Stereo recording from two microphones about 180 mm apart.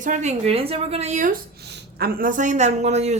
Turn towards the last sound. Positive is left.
turn(degrees=-40)  # may be behind; listen again after turning